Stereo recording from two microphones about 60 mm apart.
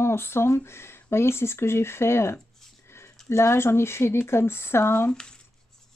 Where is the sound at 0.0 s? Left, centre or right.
Left.